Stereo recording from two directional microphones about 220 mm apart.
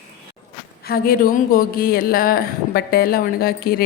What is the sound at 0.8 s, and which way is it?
Speech, 45° left (ahead or behind).